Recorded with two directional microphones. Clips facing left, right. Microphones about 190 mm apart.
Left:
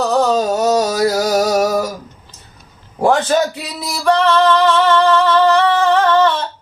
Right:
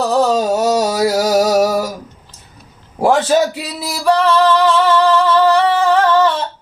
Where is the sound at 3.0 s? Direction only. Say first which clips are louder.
Right 1 dB; 5° right (ahead or behind).